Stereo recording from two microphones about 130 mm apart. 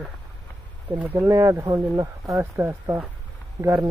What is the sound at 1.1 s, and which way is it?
Speech, 20° right (ahead or behind).